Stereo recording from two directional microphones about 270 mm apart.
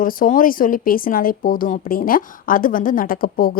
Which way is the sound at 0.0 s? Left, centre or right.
Left.